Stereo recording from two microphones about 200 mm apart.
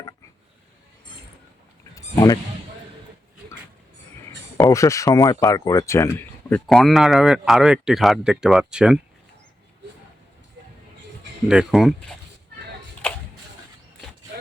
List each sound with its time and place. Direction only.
2.1 s speech: 20° left (ahead or behind)
4.3 s speech: 15° left (ahead or behind); by 9.0 s 5° right (ahead or behind)
11.4 s speech: 5° right (ahead or behind)